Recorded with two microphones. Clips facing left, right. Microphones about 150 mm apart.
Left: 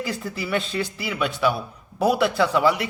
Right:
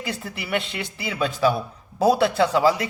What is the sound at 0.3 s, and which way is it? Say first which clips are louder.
A man's voice: left 2 dB; 20° right (ahead or behind).